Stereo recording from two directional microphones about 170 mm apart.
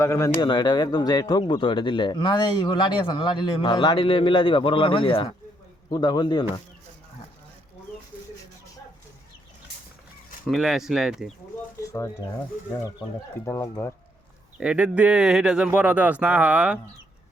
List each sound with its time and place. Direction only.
0.0 s speech: 20° left (ahead or behind)
10.4 s speech: centre (ahead or behind)
11.8 s a sound: 20° left (ahead or behind)
13.4 s speech: 15° left (ahead or behind)
14.6 s speech: 5° right (ahead or behind)